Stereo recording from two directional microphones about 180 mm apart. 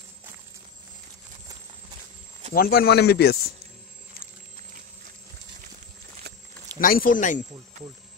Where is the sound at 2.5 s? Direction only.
55° left (ahead or behind).